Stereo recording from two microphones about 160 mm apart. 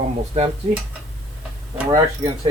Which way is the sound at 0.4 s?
40° right (ahead or behind).